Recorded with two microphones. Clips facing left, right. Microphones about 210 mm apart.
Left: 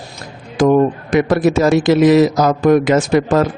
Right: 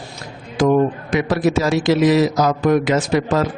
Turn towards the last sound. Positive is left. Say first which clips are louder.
# left 4 dB
turn(degrees=50)  # may be behind; listen again after turning